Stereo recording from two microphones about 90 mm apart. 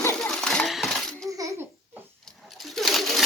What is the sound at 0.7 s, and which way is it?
Coin, centre (ahead or behind).